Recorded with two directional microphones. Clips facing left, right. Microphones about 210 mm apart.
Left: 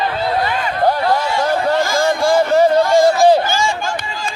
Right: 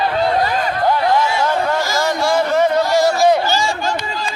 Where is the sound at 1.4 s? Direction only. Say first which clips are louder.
Left 2 dB; 50° left (ahead or behind).